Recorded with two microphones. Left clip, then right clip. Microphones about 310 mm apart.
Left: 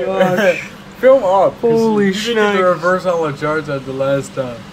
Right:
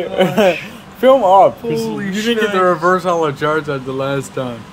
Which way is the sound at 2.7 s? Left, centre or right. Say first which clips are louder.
Even; right.